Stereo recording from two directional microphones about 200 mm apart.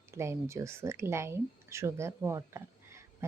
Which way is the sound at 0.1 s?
15° right (ahead or behind).